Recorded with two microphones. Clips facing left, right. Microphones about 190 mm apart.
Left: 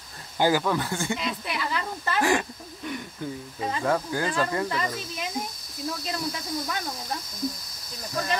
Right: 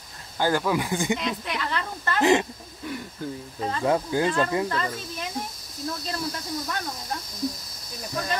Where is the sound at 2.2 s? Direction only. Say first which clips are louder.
Right 4 dB; 20° right (ahead or behind).